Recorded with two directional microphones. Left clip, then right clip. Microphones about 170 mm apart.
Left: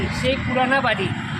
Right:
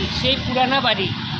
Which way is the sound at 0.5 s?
5° left (ahead or behind).